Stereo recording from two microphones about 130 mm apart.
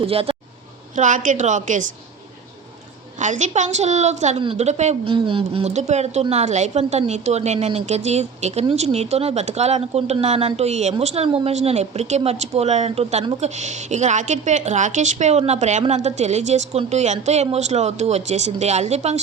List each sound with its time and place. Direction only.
0.0 s speech: 45° right (ahead or behind)
0.9 s a woman's voice: 75° right (ahead or behind)
3.2 s a woman's voice: 70° right (ahead or behind)
5.0 s speech: 40° right (ahead or behind)
5.7 s a woman's voice: 60° right (ahead or behind)